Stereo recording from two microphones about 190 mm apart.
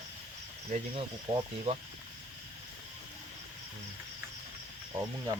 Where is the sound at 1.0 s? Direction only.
30° right (ahead or behind).